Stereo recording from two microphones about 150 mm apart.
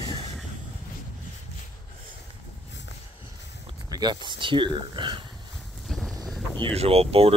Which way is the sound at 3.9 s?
30° right (ahead or behind).